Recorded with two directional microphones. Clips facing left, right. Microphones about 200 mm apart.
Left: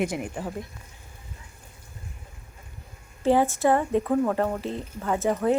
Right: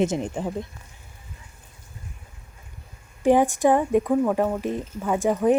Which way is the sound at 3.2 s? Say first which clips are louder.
Right 3 dB; 15° right (ahead or behind).